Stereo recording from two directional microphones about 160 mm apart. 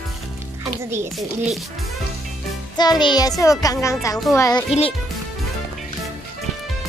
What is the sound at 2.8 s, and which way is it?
A child's voice, 25° left (ahead or behind).